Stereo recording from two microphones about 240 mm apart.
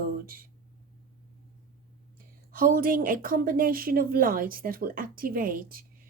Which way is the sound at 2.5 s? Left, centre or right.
Right.